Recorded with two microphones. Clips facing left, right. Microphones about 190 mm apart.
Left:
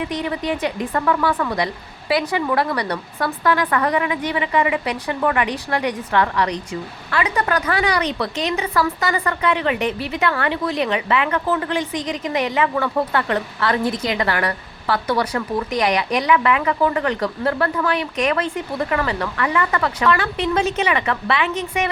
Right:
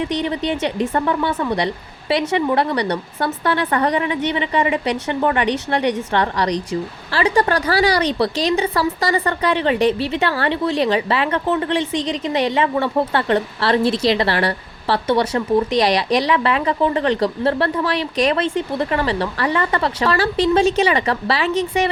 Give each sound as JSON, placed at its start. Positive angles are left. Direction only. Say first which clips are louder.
{"t": 0.2, "sound": "speech", "louder": "right 2 dB", "side_deg": -30}